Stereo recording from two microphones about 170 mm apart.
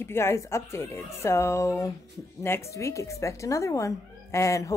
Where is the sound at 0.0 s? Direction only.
15° left (ahead or behind).